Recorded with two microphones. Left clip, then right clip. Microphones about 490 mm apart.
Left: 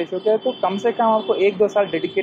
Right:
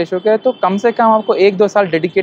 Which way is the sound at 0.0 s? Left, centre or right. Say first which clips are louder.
Right 6 dB; right.